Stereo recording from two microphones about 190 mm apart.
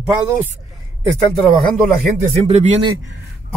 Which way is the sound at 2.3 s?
35° right (ahead or behind).